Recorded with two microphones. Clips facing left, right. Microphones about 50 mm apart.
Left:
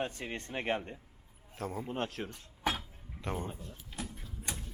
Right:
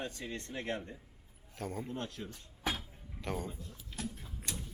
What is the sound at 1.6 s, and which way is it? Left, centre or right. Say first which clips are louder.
Speech: left 2 dB; centre.